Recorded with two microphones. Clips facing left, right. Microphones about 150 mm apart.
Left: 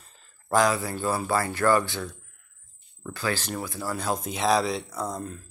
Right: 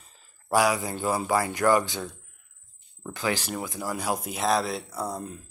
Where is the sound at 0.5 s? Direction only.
10° right (ahead or behind).